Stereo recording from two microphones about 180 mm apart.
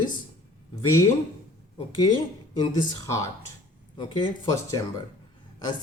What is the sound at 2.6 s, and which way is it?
Speech, 20° left (ahead or behind).